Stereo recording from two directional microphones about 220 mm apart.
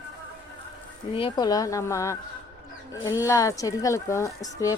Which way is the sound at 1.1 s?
20° left (ahead or behind).